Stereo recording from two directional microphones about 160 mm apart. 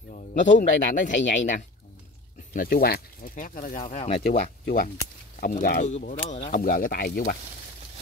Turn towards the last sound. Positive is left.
turn(degrees=65)  # may be behind; listen again after turning